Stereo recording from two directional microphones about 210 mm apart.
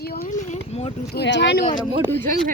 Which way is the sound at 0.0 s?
45° left (ahead or behind).